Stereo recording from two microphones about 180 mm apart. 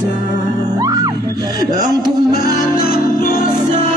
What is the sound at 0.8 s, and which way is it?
Music, 20° right (ahead or behind).